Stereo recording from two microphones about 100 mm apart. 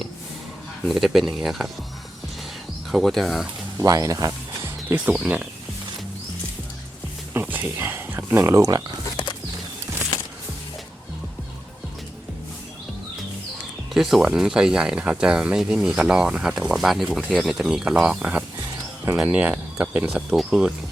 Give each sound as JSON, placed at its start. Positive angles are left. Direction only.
{"t": 0.9, "sound": "speech", "side_deg": 0}
{"t": 2.9, "sound": "speech", "side_deg": 0}
{"t": 3.8, "sound": "speech", "side_deg": -35}
{"t": 4.6, "sound": "speech", "side_deg": -20}
{"t": 7.3, "sound": "speech", "side_deg": -20}
{"t": 13.9, "sound": "speech", "side_deg": 0}